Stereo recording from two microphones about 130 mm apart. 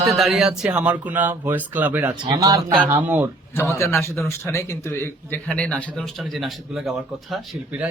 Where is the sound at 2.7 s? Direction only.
15° right (ahead or behind).